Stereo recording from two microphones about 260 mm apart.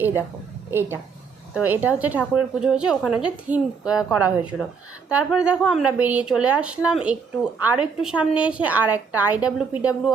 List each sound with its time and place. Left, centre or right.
0.7 s a woman's voice: centre